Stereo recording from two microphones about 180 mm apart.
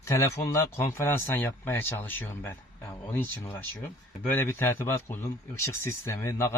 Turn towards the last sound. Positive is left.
turn(degrees=15)  # may be behind; listen again after turning